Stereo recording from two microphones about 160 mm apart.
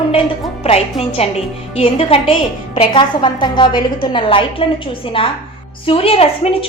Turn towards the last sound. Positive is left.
turn(degrees=40)  # may be behind; listen again after turning